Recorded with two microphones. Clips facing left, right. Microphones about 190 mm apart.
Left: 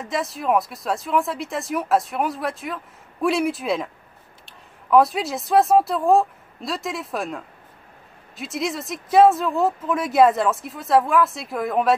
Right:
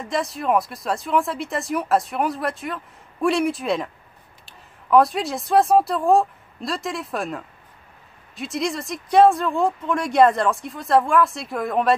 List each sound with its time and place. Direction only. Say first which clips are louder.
0.0 s speech: right 1 dB; centre (ahead or behind)